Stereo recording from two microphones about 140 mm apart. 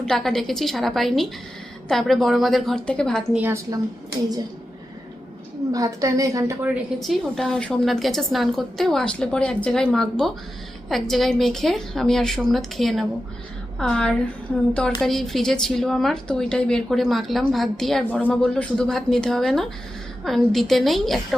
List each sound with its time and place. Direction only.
0.0 s a woman's voice: 5° left (ahead or behind)
3.3 s a woman's voice: 15° right (ahead or behind)
5.7 s a woman's voice: 25° right (ahead or behind)
7.0 s a woman's voice: centre (ahead or behind)